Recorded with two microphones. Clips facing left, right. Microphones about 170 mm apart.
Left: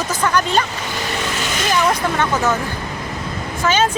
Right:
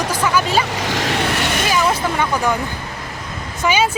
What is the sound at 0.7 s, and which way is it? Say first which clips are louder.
Vehicle: right 4 dB; 90° right.